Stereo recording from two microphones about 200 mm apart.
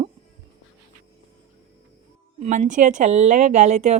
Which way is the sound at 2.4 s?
40° right (ahead or behind).